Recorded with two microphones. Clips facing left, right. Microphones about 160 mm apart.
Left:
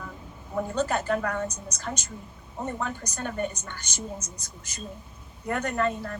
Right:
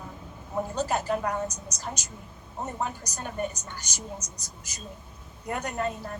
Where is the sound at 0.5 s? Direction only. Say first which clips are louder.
Left 1 dB; 55° left (ahead or behind).